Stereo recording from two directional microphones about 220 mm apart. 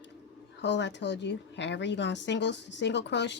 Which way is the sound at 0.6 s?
55° left (ahead or behind).